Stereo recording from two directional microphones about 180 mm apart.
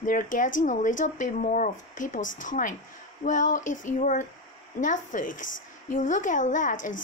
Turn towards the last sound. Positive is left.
turn(degrees=45)  # may be behind; listen again after turning